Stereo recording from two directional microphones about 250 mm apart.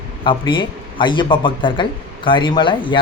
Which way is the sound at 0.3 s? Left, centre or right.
Centre.